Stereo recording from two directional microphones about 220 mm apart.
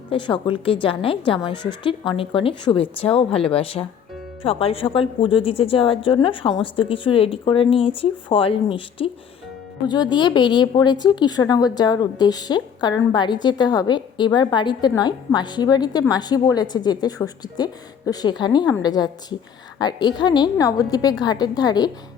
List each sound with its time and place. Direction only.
0.1 s a woman's voice: 20° left (ahead or behind)